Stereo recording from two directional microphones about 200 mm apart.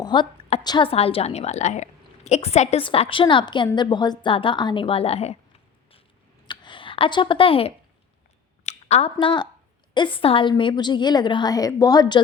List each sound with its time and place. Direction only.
0.0 s a woman's voice: 25° left (ahead or behind)
6.5 s a sound: 25° left (ahead or behind)
8.6 s a woman's voice: 30° left (ahead or behind)